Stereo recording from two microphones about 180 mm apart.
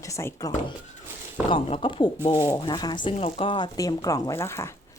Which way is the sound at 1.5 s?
30° left (ahead or behind).